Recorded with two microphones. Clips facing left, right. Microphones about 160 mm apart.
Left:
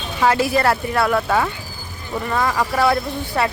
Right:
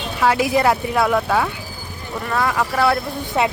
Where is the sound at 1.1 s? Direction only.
Centre (ahead or behind).